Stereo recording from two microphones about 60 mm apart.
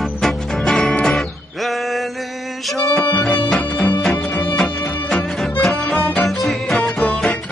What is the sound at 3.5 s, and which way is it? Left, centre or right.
Music, centre.